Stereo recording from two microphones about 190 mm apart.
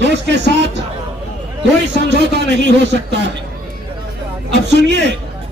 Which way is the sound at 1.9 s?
65° right (ahead or behind).